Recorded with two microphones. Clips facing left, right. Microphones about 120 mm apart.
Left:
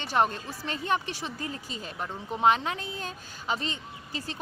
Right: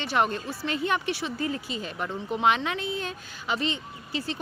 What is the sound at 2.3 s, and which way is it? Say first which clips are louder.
Speech: left 1 dB; 35° left (ahead or behind).